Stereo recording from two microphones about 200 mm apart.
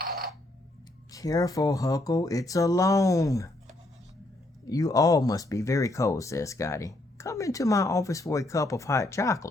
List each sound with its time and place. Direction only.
1.1 s speech: 15° left (ahead or behind)
4.7 s speech: 20° left (ahead or behind)